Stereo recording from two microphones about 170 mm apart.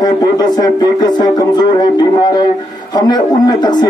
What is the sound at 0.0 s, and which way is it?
A man's voice, 25° left (ahead or behind).